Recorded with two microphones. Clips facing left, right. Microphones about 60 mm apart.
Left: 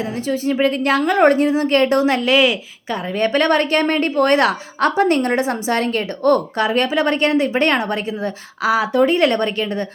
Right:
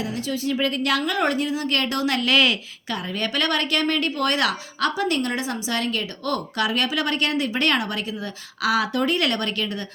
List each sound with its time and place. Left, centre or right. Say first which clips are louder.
0.0 s a woman's voice: left 5 dB; left; by 3.0 s centre
3.1 s a woman's voice: left 9 dB; left